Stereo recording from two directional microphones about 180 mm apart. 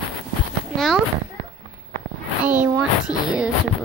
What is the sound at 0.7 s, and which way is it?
Speech, centre (ahead or behind).